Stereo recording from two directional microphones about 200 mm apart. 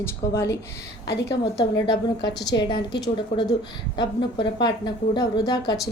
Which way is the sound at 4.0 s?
20° left (ahead or behind).